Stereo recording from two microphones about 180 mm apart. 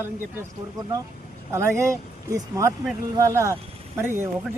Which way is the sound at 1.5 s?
15° right (ahead or behind).